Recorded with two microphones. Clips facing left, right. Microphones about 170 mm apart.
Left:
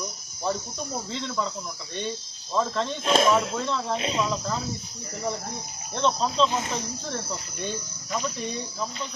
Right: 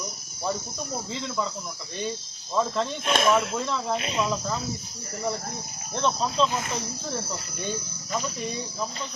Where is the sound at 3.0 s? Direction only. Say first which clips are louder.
Left 2 dB; 30° left (ahead or behind).